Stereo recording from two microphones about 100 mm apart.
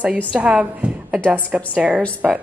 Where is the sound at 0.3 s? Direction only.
10° right (ahead or behind).